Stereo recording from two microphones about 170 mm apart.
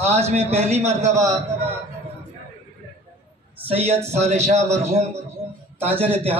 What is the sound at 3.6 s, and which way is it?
Speech, 35° right (ahead or behind).